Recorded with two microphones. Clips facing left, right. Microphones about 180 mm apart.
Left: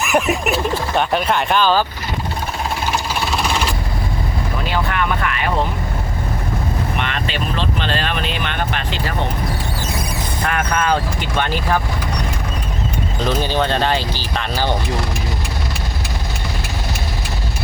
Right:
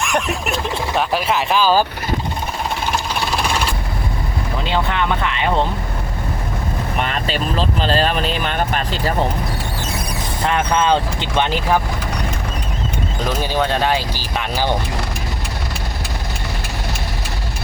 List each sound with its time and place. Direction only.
0.0 s speech: 5° left (ahead or behind)
2.9 s jackhammer: centre (ahead or behind)
4.6 s speech: 20° right (ahead or behind)
7.0 s speech: 40° right (ahead or behind)
10.4 s speech: 25° right (ahead or behind)
13.2 s speech: 5° right (ahead or behind)